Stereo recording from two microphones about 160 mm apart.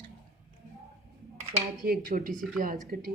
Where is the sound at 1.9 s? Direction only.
65° right (ahead or behind).